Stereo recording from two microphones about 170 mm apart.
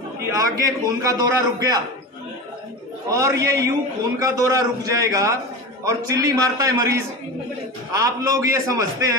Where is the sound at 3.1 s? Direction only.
20° right (ahead or behind).